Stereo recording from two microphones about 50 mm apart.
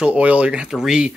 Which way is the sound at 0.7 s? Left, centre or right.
Centre.